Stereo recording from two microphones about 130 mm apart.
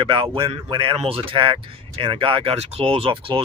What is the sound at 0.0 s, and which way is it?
Speech, 40° right (ahead or behind).